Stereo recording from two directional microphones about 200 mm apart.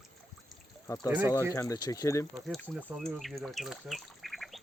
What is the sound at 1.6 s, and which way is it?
Speech, 15° left (ahead or behind).